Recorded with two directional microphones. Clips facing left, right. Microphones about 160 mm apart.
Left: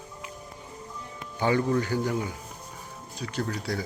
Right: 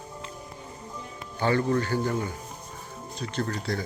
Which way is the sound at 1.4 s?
10° left (ahead or behind).